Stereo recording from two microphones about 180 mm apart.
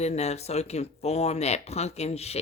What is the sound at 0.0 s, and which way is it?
Speech, 35° left (ahead or behind).